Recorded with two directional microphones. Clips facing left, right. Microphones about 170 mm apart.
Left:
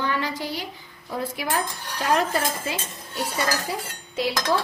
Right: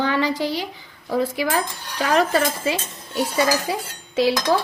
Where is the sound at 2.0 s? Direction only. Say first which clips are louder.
Right 4 dB; 90° right.